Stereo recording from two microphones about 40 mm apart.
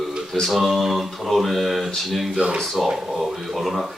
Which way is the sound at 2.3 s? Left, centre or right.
Right.